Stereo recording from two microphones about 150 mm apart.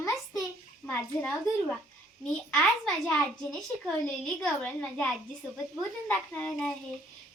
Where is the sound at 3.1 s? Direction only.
5° left (ahead or behind).